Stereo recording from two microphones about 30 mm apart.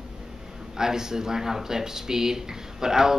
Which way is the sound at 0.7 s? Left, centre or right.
Centre.